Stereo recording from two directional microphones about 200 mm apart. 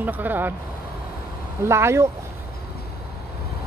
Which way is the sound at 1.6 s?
15° right (ahead or behind).